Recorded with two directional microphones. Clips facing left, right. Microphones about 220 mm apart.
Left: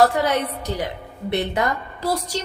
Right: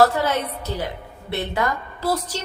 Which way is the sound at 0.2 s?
15° left (ahead or behind).